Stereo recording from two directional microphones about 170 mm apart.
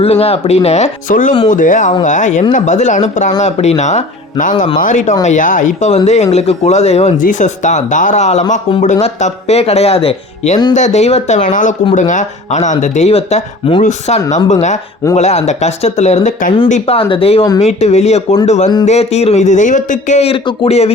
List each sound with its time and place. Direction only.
0.0 s a man's voice: 35° left (ahead or behind)